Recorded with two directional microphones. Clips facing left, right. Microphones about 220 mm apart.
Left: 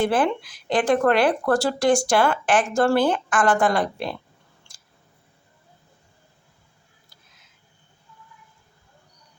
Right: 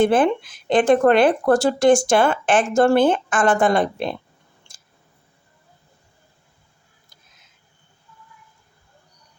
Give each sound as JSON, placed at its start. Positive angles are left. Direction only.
{"t": 0.0, "sound": "speech", "side_deg": -20}